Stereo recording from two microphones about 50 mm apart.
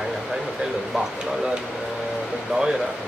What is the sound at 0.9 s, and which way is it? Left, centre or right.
Speech, centre.